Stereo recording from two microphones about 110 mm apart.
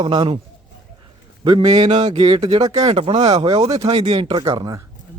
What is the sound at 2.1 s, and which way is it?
Speech, 55° right (ahead or behind).